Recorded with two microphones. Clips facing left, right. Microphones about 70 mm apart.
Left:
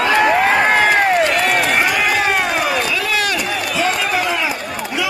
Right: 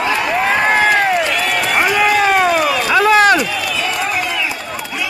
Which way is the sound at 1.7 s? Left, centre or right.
Right.